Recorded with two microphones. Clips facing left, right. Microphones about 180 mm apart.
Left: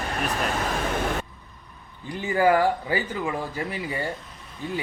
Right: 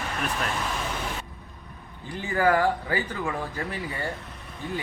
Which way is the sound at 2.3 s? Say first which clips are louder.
Left 2 dB; 15° left (ahead or behind).